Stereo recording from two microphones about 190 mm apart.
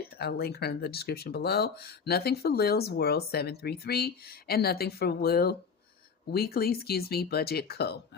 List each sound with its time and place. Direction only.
0.0 s speech: 55° left (ahead or behind)